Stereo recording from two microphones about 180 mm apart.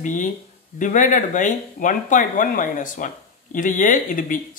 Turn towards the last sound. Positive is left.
turn(degrees=50)  # may be behind; listen again after turning